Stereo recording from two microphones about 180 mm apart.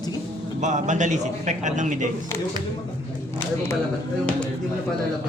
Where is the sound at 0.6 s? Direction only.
40° right (ahead or behind).